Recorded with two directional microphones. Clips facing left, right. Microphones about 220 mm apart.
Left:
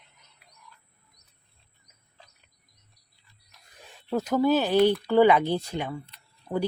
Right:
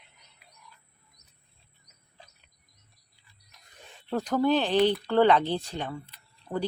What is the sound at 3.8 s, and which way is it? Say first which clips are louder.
Speech: left 2 dB; centre (ahead or behind).